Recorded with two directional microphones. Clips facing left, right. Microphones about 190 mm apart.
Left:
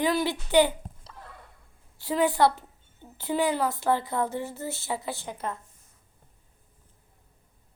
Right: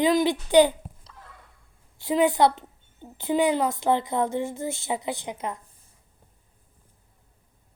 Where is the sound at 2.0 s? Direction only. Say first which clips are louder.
Right 3 dB; 15° right (ahead or behind).